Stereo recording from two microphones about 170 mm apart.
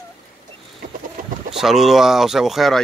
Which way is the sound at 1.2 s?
55° right (ahead or behind).